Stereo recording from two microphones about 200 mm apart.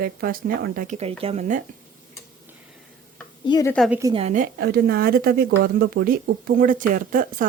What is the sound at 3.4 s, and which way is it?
Speech, 20° left (ahead or behind).